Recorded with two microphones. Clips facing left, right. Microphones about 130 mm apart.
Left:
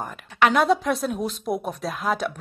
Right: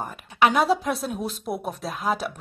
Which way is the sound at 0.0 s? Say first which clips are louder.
Even; 5° right (ahead or behind).